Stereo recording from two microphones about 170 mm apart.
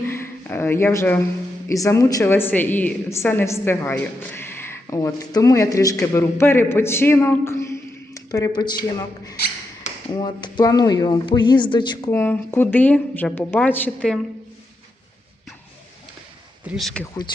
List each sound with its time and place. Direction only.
0.1 s speech: 15° left (ahead or behind)
12.1 s speech: 15° left (ahead or behind)
16.6 s speech: centre (ahead or behind)